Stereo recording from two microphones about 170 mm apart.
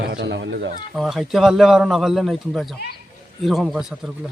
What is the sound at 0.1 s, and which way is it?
Speech, 90° right.